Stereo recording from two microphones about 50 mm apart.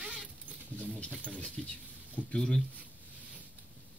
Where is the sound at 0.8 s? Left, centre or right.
Left.